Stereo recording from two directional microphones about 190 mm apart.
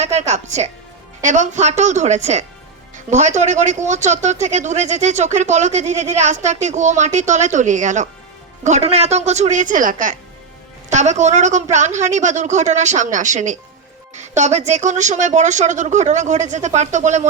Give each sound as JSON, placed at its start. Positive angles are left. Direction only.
{"t": 0.0, "sound": "a man's voice", "side_deg": -35}